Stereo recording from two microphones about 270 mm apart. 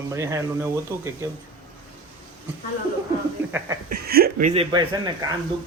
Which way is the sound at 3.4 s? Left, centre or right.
Centre.